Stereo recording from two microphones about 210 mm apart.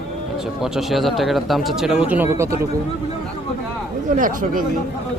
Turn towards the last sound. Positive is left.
turn(degrees=-40)  # may be behind; listen again after turning